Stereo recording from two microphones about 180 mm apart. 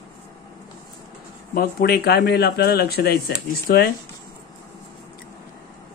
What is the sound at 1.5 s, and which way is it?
Speech, 60° left (ahead or behind).